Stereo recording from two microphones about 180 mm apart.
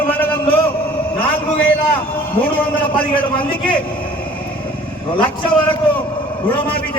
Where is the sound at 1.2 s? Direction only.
10° left (ahead or behind).